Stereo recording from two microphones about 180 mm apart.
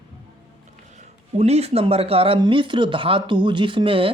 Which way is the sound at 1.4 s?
35° right (ahead or behind).